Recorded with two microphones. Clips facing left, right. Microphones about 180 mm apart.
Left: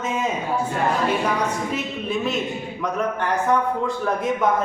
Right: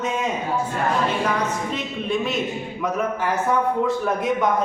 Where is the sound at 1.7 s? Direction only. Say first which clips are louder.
Even; centre (ahead or behind).